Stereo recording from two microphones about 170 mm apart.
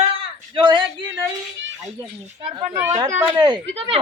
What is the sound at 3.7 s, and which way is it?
Speech, 35° right (ahead or behind).